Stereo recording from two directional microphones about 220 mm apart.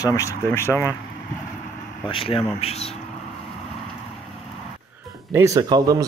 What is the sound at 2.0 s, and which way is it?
Speech, 25° left (ahead or behind).